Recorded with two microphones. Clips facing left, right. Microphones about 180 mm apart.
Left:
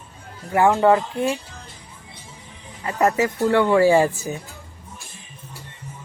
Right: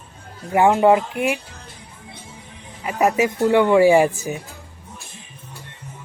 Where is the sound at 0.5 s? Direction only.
20° right (ahead or behind).